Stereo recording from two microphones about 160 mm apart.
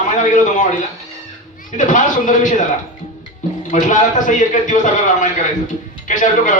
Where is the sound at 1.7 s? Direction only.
50° left (ahead or behind).